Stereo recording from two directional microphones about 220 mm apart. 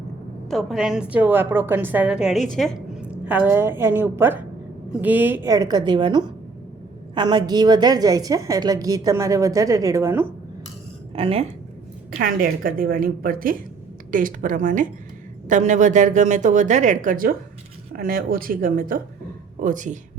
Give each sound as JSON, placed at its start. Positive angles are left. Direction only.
{"t": 0.5, "sound": "a woman's voice", "side_deg": 0}
{"t": 11.1, "sound": "speech", "side_deg": -25}
{"t": 12.2, "sound": "speech", "side_deg": -40}